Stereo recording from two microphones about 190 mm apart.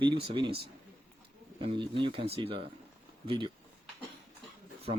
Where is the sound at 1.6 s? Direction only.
25° right (ahead or behind).